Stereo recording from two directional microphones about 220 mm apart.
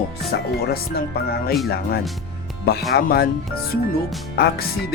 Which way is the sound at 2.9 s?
45° left (ahead or behind).